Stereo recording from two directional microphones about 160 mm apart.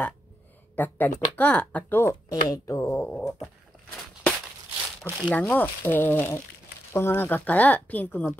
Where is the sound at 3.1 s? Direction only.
5° left (ahead or behind).